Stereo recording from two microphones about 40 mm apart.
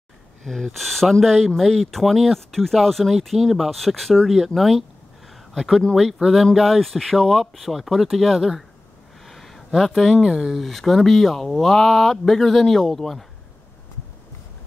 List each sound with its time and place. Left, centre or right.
0.4 s speech: centre
9.2 s a sound: centre
9.8 s speech: centre
10.2 s speech: centre
10.5 s speech: centre